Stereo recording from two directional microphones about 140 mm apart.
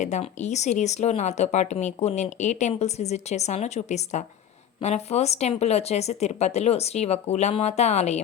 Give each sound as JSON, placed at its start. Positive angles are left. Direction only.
{"t": 0.0, "sound": "speech", "side_deg": 55}